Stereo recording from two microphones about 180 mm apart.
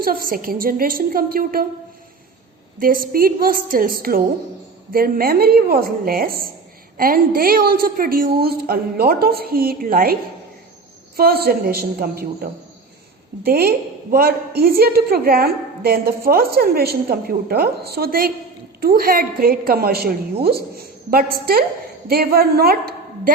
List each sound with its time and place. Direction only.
0.0 s a woman's voice: 55° right (ahead or behind)
2.7 s a woman's voice: 50° right (ahead or behind)
11.2 s a woman's voice: 55° right (ahead or behind)